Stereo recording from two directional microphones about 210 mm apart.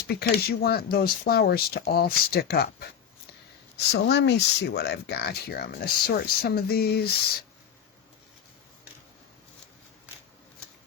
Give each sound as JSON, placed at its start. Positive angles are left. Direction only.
{"t": 0.1, "sound": "speech", "side_deg": 50}
{"t": 3.9, "sound": "speech", "side_deg": 50}